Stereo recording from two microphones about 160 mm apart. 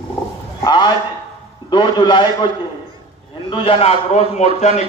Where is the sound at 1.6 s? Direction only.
30° left (ahead or behind); by 4.8 s 45° left (ahead or behind).